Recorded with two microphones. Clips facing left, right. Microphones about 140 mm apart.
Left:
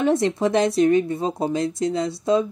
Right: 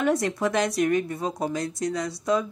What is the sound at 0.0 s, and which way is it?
A woman's voice, 25° left (ahead or behind).